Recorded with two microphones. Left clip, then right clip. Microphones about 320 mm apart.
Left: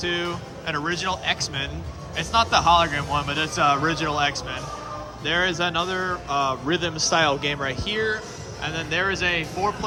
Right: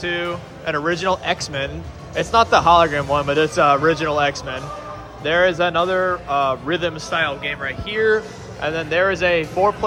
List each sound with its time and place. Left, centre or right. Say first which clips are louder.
0.0 s a man's voice: right 3 dB; centre